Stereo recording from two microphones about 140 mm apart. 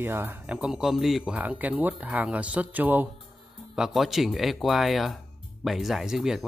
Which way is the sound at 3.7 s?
5° right (ahead or behind).